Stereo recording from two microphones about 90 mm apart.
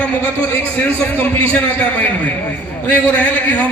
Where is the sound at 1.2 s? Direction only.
15° left (ahead or behind).